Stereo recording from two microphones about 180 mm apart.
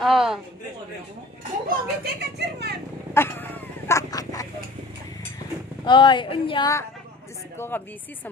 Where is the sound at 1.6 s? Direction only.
65° right (ahead or behind).